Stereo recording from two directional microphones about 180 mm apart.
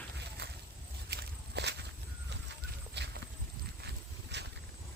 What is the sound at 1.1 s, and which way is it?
Walk, 70° right (ahead or behind).